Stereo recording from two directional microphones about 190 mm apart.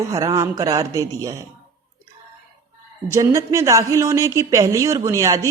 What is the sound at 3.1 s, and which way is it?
Mantra, 15° right (ahead or behind).